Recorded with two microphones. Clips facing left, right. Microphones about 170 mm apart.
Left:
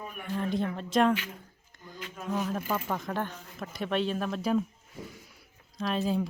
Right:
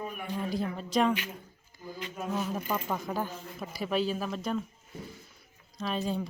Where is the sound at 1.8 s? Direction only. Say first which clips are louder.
Right 4 dB; 5° right (ahead or behind).